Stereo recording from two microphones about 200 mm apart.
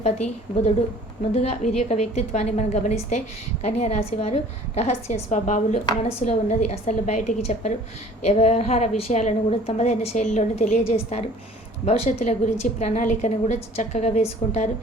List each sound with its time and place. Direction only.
1.3 s a woman's voice: 35° left (ahead or behind)